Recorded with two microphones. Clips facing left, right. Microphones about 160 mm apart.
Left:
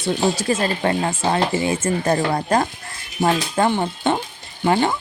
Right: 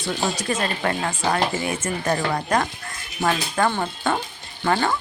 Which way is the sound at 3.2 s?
20° left (ahead or behind).